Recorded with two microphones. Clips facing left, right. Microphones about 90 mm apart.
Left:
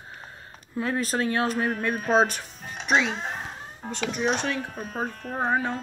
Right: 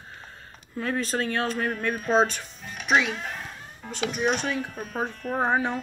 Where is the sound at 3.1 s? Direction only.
30° left (ahead or behind).